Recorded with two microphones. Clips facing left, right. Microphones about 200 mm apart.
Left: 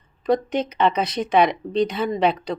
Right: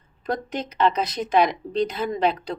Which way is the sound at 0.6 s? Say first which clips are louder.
Left 2 dB; 60° left (ahead or behind).